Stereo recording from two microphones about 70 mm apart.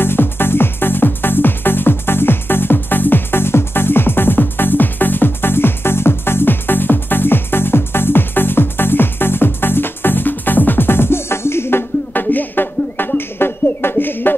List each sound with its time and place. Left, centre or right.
0.0 s music: left